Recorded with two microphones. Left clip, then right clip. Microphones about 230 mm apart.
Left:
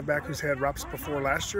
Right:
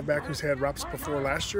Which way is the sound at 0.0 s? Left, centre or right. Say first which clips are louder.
Even; centre.